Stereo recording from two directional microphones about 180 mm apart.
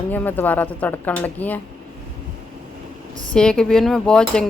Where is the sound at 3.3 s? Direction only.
5° left (ahead or behind).